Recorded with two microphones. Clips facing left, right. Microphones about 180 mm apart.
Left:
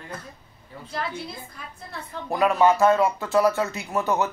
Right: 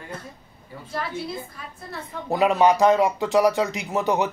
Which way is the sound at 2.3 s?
20° right (ahead or behind).